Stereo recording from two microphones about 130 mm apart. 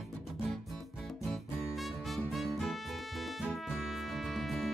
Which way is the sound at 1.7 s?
Centre (ahead or behind).